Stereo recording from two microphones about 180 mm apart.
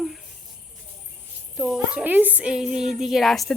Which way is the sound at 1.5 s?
Centre (ahead or behind).